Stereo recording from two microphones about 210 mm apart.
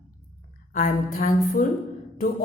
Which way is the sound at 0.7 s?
40° left (ahead or behind).